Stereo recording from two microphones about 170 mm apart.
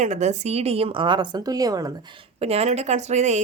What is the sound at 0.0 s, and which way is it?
Speech, 45° right (ahead or behind).